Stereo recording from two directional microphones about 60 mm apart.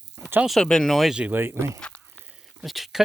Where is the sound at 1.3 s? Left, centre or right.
Right.